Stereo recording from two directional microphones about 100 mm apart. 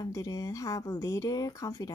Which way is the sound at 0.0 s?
35° left (ahead or behind).